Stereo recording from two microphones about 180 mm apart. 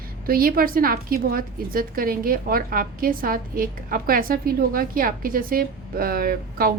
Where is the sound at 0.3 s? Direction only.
55° right (ahead or behind).